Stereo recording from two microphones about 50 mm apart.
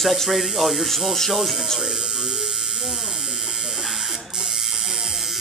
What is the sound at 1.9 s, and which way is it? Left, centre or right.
Electric shaver, centre.